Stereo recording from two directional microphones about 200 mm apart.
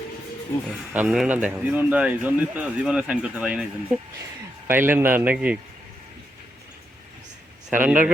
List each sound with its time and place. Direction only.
0.9 s a man's voice: 5° right (ahead or behind)
7.7 s a man's voice: 10° right (ahead or behind)